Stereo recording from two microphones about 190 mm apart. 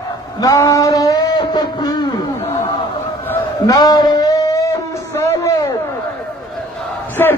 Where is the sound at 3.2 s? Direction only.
15° left (ahead or behind).